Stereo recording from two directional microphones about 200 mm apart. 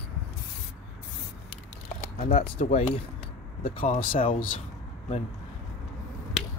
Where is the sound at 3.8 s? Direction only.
40° left (ahead or behind).